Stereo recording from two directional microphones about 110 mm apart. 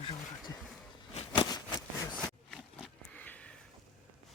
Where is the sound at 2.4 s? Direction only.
5° left (ahead or behind).